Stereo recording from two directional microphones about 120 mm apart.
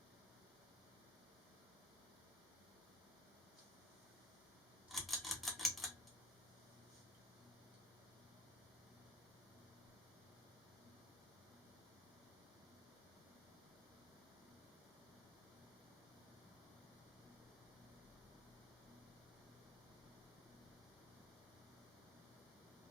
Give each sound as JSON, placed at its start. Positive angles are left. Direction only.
{"t": 4.9, "sound": "typewriter", "side_deg": 0}